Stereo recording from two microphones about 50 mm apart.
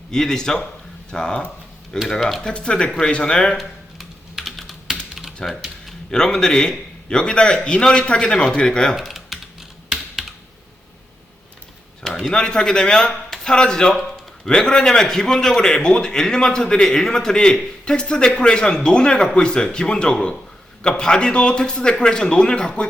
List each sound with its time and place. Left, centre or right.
0.1 s a man's voice: centre
2.4 s speech: centre
4.4 s computer keyboard: centre
5.4 s a man's voice: centre
9.0 s typing: centre
12.3 s a man's voice: centre